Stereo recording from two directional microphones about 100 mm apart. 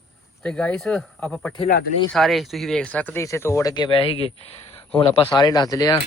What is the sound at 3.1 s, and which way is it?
Speech, 25° left (ahead or behind).